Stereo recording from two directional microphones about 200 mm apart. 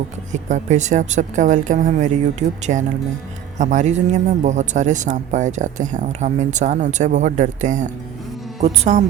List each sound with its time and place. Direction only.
0.3 s speech: 35° right (ahead or behind)
3.6 s speech: 35° right (ahead or behind)